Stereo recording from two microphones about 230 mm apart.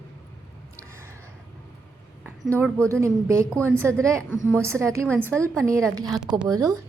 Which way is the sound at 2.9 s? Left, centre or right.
Centre.